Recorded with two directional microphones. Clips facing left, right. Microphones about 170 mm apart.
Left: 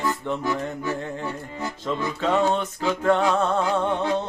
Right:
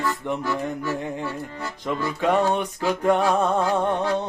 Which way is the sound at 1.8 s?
15° right (ahead or behind).